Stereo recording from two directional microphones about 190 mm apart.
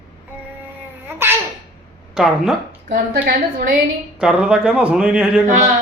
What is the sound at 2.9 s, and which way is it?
Speech, 50° right (ahead or behind).